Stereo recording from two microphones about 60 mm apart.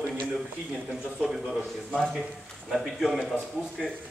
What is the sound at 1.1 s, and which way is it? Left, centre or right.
Speech, centre.